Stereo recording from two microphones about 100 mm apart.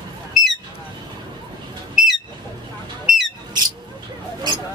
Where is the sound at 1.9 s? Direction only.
Centre (ahead or behind).